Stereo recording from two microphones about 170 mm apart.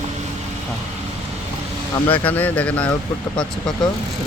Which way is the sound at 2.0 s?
30° left (ahead or behind).